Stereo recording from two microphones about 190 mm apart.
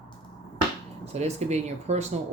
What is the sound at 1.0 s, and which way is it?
Speech, 35° right (ahead or behind).